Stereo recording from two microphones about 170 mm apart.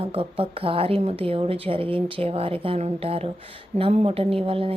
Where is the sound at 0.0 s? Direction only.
35° right (ahead or behind).